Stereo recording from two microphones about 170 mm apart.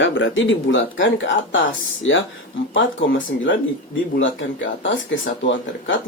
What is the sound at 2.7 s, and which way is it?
Speech, 90° left.